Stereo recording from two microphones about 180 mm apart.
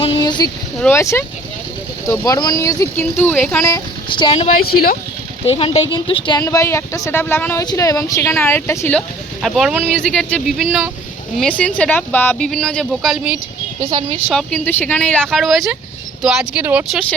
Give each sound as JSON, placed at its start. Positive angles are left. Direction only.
{"t": 0.0, "sound": "a sound", "side_deg": 25}
{"t": 0.8, "sound": "speech", "side_deg": 15}
{"t": 3.6, "sound": "speech", "side_deg": 20}
{"t": 4.6, "sound": "speech", "side_deg": 55}
{"t": 5.5, "sound": "speech", "side_deg": 30}
{"t": 9.9, "sound": "speech", "side_deg": 5}
{"t": 14.3, "sound": "speech", "side_deg": 10}